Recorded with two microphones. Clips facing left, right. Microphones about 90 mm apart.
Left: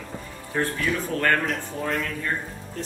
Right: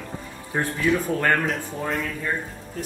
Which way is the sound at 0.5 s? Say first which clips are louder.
Even; 15° right (ahead or behind).